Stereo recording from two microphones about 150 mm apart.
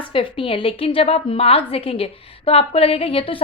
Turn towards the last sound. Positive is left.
turn(degrees=40)  # may be behind; listen again after turning